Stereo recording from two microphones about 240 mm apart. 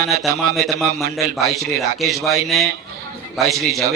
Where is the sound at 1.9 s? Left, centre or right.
Centre.